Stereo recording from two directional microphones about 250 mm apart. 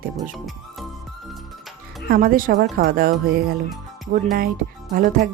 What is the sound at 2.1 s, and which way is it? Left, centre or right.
Speech, right.